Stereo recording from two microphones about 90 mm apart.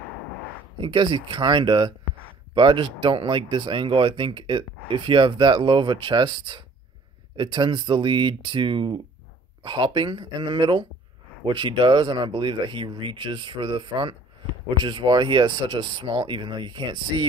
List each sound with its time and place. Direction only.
0.7 s speech: 65° right (ahead or behind)